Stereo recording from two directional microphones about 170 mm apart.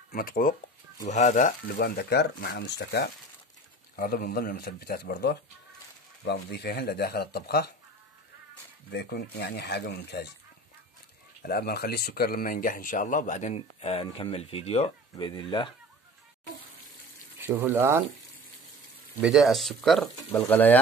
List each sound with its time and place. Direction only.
0.1 s speech: 60° left (ahead or behind)
1.0 s speech: 45° left (ahead or behind)
1.7 s speech: 60° left (ahead or behind); by 3.1 s 85° left
3.9 s speech: 60° left (ahead or behind)
6.2 s speech: 80° left
8.9 s speech: 80° left
11.4 s speech: 70° left (ahead or behind); by 15.7 s 30° left (ahead or behind)
17.4 s speech: 10° right (ahead or behind)
19.2 s speech: centre (ahead or behind)